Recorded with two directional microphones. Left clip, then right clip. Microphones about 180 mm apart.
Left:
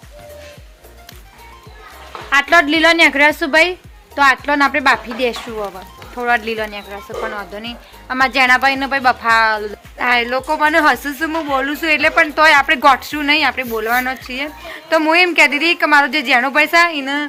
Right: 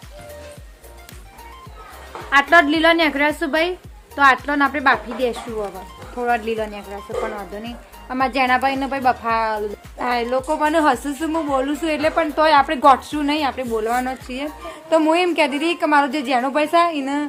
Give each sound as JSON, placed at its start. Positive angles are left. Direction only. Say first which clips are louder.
{"t": 2.3, "sound": "speech", "louder": "left 2 dB", "side_deg": 30}
{"t": 6.1, "sound": "speech", "louder": "left 3 dB", "side_deg": 0}